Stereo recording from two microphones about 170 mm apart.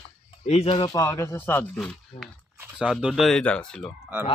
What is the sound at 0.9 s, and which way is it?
Speech, 20° left (ahead or behind).